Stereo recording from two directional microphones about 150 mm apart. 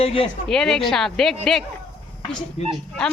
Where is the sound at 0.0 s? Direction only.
35° left (ahead or behind).